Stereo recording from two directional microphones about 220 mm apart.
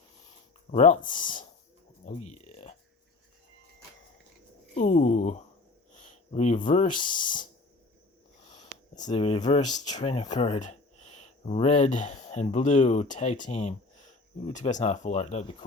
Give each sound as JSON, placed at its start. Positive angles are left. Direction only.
{"t": 0.7, "sound": "speech", "side_deg": 30}
{"t": 2.3, "sound": "music", "side_deg": 30}
{"t": 4.7, "sound": "speech", "side_deg": 30}
{"t": 8.4, "sound": "sniff", "side_deg": 30}
{"t": 9.0, "sound": "speech", "side_deg": 25}